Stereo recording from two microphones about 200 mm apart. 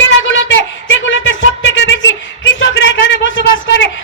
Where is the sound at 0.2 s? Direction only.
70° left (ahead or behind).